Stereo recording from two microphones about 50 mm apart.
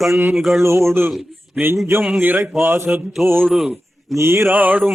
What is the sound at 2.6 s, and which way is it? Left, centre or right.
Mantra, right.